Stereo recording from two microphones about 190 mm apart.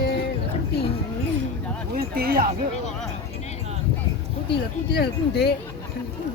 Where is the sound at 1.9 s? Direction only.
55° right (ahead or behind).